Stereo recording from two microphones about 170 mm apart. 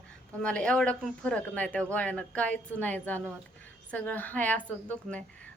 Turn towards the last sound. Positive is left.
turn(degrees=10)  # may be behind; listen again after turning